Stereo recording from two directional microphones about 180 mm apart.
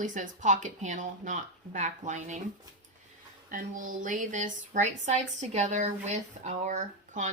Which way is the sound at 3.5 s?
50° right (ahead or behind).